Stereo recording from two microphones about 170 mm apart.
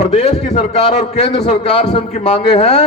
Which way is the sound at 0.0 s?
40° left (ahead or behind).